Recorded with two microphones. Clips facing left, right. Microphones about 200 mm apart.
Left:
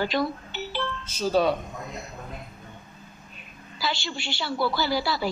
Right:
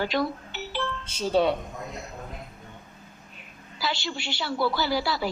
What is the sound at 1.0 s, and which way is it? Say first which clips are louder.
Speech: even; 25° right (ahead or behind).